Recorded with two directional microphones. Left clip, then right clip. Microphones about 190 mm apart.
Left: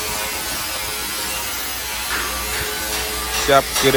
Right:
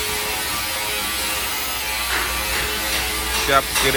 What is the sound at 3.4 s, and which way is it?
Speech, 15° left (ahead or behind).